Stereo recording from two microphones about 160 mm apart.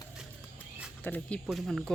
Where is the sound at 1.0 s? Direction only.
10° left (ahead or behind).